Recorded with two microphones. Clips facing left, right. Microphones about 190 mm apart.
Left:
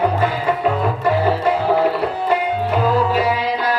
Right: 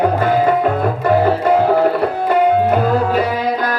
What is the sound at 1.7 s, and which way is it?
Music, 50° right (ahead or behind).